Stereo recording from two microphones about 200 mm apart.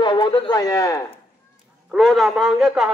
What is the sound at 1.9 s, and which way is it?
Speech, centre (ahead or behind).